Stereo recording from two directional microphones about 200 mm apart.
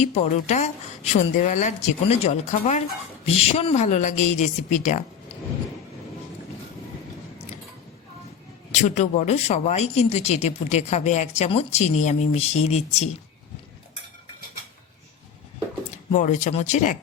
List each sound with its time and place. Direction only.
0.0 s speech: 35° left (ahead or behind)
8.7 s speech: 35° left (ahead or behind)
16.1 s speech: 35° left (ahead or behind)